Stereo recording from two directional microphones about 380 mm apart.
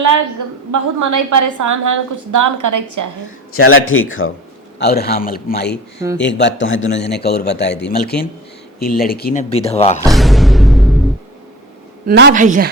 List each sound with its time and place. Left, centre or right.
0.7 s a woman's voice: right
3.5 s a man's voice: left; by 10.0 s centre
10.0 s a sound: centre
12.0 s a woman's voice: right